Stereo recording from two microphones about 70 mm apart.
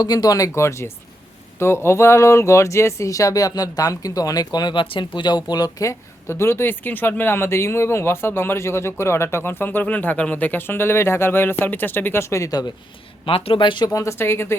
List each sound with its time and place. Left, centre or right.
0.0 s speech: left
12.5 s speech: left
13.9 s speech: left